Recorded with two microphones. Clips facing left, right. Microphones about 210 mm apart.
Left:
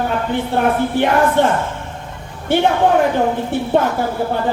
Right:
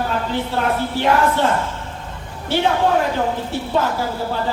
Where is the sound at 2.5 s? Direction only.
55° left (ahead or behind).